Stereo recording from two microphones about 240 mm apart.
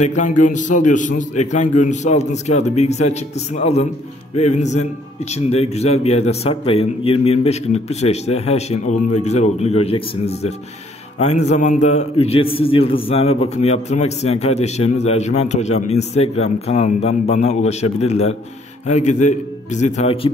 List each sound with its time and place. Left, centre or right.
0.0 s a man's voice: left